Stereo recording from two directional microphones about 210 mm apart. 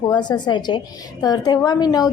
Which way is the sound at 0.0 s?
20° left (ahead or behind).